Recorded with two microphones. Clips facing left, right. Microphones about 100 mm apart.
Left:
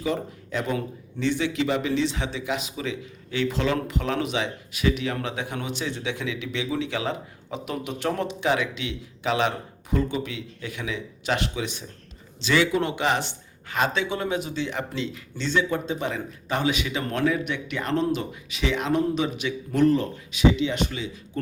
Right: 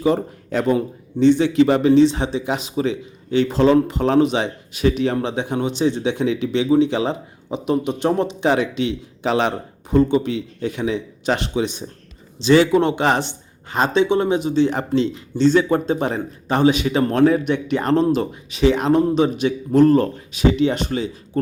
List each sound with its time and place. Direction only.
0.0 s speech: 35° right (ahead or behind)
8.4 s speech: 35° right (ahead or behind)
14.6 s speech: 35° right (ahead or behind)